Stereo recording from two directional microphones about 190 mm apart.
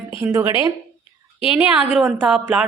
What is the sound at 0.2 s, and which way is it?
Speech, 15° right (ahead or behind).